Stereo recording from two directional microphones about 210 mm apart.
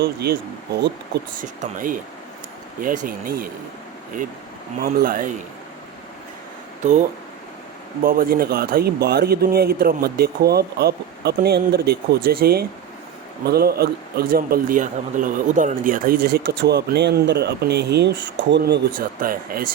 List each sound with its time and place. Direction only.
0.0 s a man's voice: 50° right (ahead or behind)
1.4 s speech: 40° right (ahead or behind)
4.8 s a man's voice: 45° right (ahead or behind)
8.0 s a man's voice: 45° right (ahead or behind)